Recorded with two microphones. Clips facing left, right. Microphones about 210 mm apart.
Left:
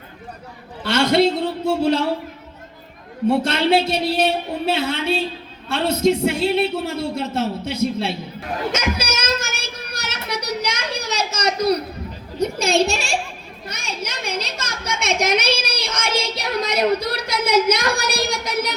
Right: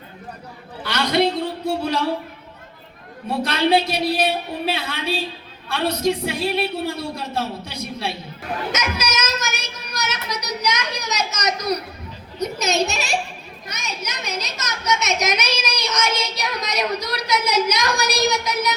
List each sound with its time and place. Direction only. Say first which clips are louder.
0.9 s a woman's voice: left 4 dB; 25° left (ahead or behind)
3.2 s a woman's voice: left 3 dB; 25° left (ahead or behind)
8.7 s child singing: left 2 dB; 30° left (ahead or behind)
9.9 s a sound: right 1 dB; 30° left (ahead or behind)
12.4 s a woman's voice: left 3 dB; 30° left (ahead or behind)